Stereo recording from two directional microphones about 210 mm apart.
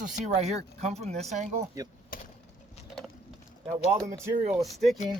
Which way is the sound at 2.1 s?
45° left (ahead or behind).